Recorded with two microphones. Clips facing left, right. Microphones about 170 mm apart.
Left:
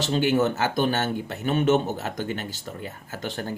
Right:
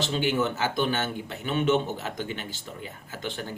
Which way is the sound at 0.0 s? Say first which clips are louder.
Left 4 dB; 45° left (ahead or behind).